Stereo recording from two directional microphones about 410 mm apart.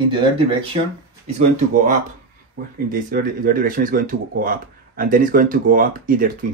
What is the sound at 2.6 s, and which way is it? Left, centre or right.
Speech, right.